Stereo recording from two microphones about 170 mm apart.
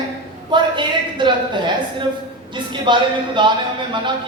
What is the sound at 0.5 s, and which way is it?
A woman's voice, 30° right (ahead or behind).